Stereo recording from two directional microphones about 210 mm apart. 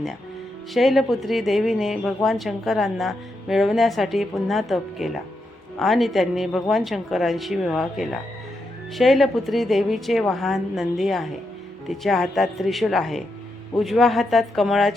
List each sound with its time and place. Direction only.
0.7 s speech: centre (ahead or behind)